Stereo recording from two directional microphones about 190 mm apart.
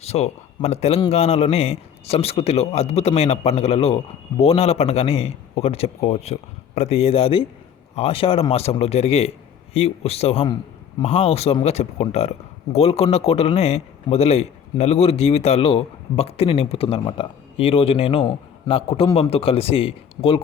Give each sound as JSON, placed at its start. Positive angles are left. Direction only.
{"t": 0.0, "sound": "a man's voice", "side_deg": 35}